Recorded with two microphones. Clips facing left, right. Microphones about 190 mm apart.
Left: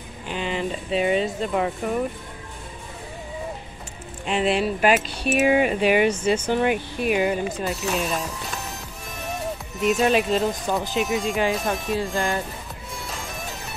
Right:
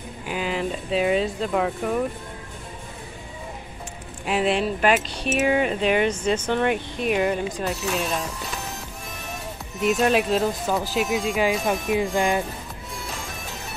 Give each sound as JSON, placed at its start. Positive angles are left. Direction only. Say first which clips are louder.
{"t": 0.3, "sound": "speech", "louder": "even", "side_deg": -5}
{"t": 4.3, "sound": "speech", "louder": "even", "side_deg": 0}
{"t": 9.3, "sound": "speech", "louder": "left 7 dB", "side_deg": 0}
{"t": 11.9, "sound": "speech", "louder": "right 4 dB", "side_deg": -15}